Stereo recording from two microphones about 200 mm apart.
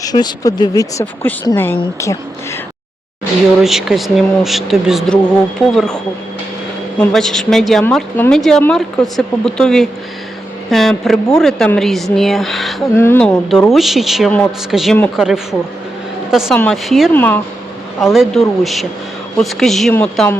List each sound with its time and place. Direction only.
0.0 s speech: 20° left (ahead or behind)
3.6 s a woman's voice: centre (ahead or behind)
7.0 s a woman's voice: centre (ahead or behind)
12.9 s a woman's voice: 10° left (ahead or behind)
18.0 s a woman's voice: centre (ahead or behind)